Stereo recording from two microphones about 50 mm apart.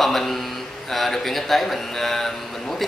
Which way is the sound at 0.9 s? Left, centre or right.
Centre.